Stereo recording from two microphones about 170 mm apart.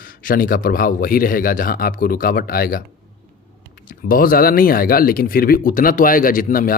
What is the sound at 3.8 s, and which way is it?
Speech, 55° left (ahead or behind).